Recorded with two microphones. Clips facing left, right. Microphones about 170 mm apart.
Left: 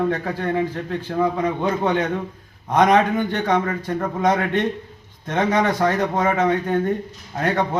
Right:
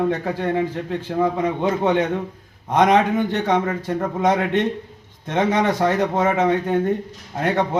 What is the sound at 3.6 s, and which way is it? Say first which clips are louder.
Speech: right 1 dB; 10° right (ahead or behind).